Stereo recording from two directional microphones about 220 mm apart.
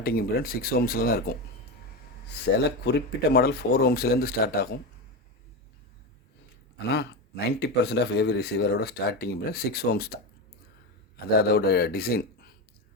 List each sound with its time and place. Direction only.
0.0 s speech: 40° left (ahead or behind)
2.3 s speech: 50° left (ahead or behind)
6.9 s speech: 50° left (ahead or behind)
11.3 s speech: 45° left (ahead or behind)